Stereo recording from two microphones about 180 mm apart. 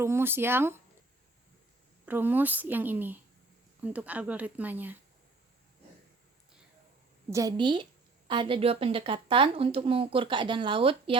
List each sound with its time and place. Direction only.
0.0 s a woman's voice: 15° right (ahead or behind)
2.0 s a woman's voice: 10° right (ahead or behind)
7.3 s speech: 20° right (ahead or behind)